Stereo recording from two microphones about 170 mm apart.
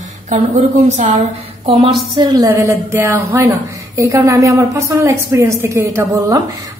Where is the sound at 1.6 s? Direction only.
35° right (ahead or behind).